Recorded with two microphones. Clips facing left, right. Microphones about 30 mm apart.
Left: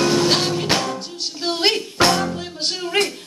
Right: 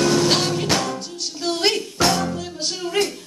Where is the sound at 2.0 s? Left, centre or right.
Left.